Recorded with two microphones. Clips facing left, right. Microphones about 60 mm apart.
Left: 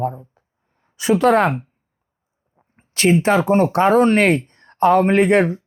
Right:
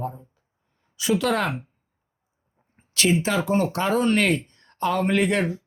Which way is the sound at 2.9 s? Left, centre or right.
Left.